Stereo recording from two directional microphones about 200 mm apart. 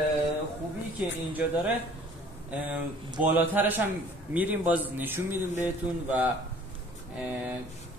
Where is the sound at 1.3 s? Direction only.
10° right (ahead or behind).